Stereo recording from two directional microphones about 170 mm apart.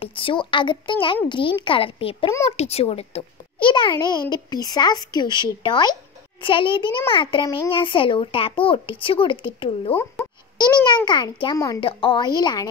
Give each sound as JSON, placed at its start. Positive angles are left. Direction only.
{"t": 0.0, "sound": "a child's voice", "side_deg": 30}